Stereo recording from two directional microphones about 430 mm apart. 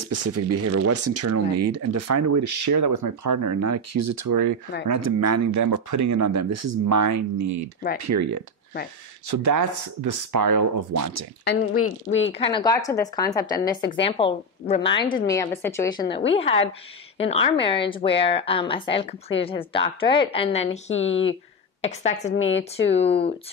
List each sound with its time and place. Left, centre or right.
0.0 s speech: right
11.4 s speech: left
12.4 s a woman's voice: centre
21.0 s speech: left
21.8 s a woman's voice: centre
22.3 s speech: left
22.8 s a woman's voice: centre